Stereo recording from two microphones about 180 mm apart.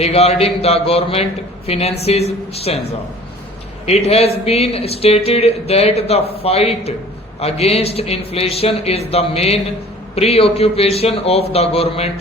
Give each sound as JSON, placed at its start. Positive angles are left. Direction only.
{"t": 0.0, "sound": "speech", "side_deg": 35}
{"t": 3.8, "sound": "speech", "side_deg": 35}